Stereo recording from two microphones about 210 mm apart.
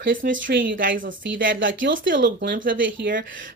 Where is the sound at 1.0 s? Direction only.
60° right (ahead or behind).